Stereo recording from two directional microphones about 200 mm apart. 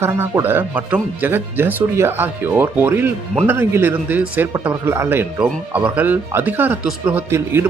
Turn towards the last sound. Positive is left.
turn(degrees=-10)  # may be behind; listen again after turning